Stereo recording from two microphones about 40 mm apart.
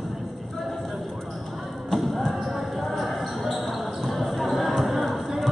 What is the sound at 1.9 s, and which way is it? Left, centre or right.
Basketball bounce, centre.